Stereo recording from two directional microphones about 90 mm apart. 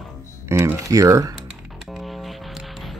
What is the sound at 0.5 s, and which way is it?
Speech, 30° right (ahead or behind).